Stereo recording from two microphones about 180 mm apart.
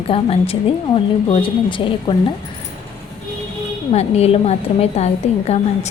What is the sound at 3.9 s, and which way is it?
A woman's voice, 35° left (ahead or behind).